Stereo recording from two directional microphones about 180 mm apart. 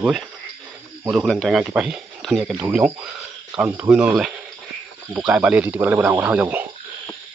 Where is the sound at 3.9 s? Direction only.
5° right (ahead or behind).